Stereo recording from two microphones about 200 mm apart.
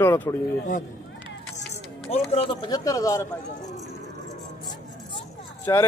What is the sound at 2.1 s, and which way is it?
Speech, 30° left (ahead or behind).